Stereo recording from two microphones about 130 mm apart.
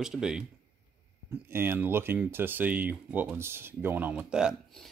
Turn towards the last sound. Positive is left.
turn(degrees=-10)  # may be behind; listen again after turning